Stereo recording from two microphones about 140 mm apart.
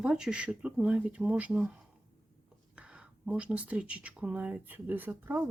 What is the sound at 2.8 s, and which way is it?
Speech, 10° right (ahead or behind).